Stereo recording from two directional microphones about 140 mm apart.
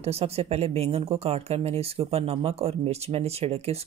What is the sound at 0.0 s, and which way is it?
Speech, 45° right (ahead or behind).